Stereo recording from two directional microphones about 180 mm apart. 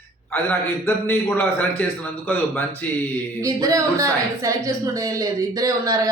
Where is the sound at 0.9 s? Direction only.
10° left (ahead or behind).